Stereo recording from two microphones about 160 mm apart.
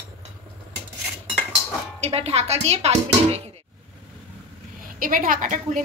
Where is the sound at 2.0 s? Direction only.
40° right (ahead or behind).